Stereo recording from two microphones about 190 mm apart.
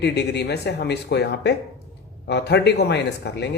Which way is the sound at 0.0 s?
60° left (ahead or behind).